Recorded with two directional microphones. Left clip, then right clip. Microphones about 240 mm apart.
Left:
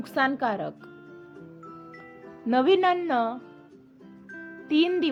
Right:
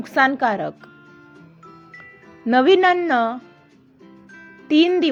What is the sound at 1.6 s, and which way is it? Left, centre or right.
Music, centre.